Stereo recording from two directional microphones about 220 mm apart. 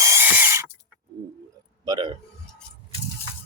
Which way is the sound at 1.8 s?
20° right (ahead or behind).